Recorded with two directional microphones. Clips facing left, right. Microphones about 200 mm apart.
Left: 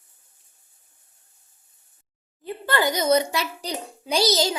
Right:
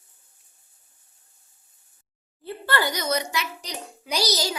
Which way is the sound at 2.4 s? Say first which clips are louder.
Left 2 dB; 15° left (ahead or behind).